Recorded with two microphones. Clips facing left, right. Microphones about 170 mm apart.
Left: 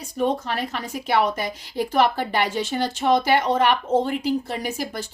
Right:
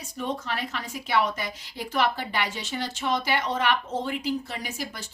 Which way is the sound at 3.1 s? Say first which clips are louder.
Left 7 dB; 40° left (ahead or behind).